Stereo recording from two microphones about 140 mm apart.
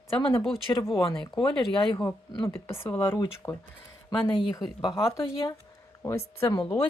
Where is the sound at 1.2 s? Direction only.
30° left (ahead or behind).